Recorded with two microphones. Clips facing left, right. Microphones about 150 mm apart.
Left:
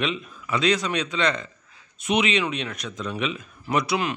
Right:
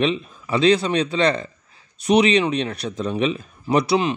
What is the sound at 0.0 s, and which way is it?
Speech, 30° right (ahead or behind).